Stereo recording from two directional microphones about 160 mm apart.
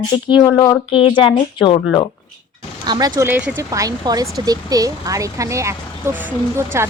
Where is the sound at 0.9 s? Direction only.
35° left (ahead or behind).